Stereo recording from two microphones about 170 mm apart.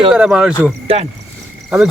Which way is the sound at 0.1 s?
5° right (ahead or behind).